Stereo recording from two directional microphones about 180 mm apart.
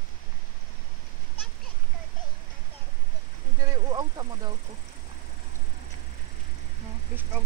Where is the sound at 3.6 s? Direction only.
20° right (ahead or behind).